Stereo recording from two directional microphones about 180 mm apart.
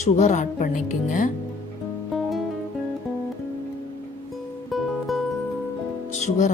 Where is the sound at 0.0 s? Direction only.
40° left (ahead or behind).